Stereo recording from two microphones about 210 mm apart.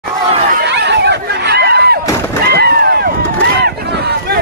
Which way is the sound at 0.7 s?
55° right (ahead or behind).